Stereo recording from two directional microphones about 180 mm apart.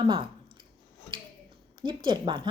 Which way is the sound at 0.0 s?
30° right (ahead or behind).